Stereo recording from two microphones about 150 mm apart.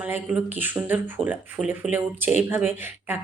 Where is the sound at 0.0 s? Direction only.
10° right (ahead or behind).